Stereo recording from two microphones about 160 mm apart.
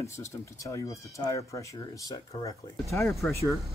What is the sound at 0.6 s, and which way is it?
Speech, 20° left (ahead or behind).